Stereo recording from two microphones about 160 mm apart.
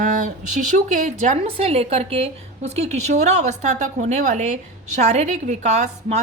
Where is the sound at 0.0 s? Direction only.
50° right (ahead or behind).